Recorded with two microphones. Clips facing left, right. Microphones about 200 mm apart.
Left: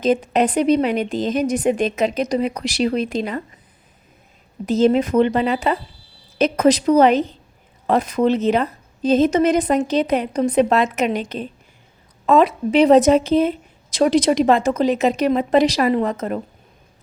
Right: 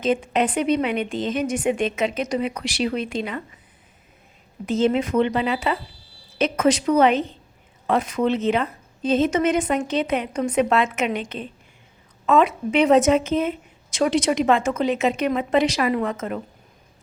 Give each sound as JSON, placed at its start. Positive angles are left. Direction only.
{"t": 0.0, "sound": "a woman's voice", "side_deg": 40}
{"t": 4.6, "sound": "a woman's voice", "side_deg": 40}